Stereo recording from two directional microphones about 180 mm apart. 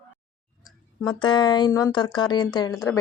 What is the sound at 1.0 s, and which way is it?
A woman's voice, 25° left (ahead or behind).